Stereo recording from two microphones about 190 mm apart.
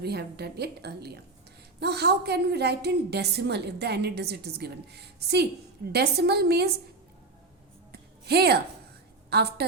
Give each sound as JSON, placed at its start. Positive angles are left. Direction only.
{"t": 0.0, "sound": "a woman's voice", "side_deg": -60}
{"t": 7.9, "sound": "music", "side_deg": -55}
{"t": 9.3, "sound": "a woman's voice", "side_deg": -55}